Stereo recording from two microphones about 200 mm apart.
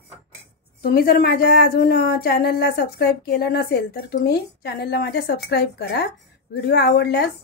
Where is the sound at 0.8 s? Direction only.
50° left (ahead or behind).